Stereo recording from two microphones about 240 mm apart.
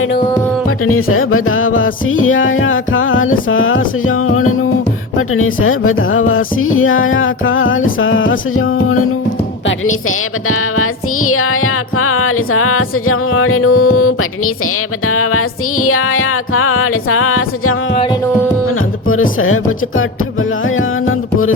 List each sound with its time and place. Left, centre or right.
0.9 s music: left
17.9 s music: left
19.0 s music: left
20.7 s music: left